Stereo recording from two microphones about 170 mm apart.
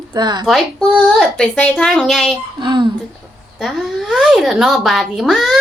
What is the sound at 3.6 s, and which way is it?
Speech, centre (ahead or behind).